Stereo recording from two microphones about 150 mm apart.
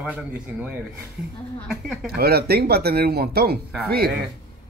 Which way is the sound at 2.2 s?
90° right.